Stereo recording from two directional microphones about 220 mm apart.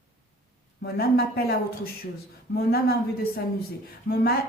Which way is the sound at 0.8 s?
45° left (ahead or behind).